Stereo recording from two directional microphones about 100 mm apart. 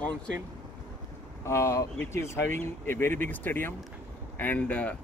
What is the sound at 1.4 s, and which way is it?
Speech, 30° left (ahead or behind).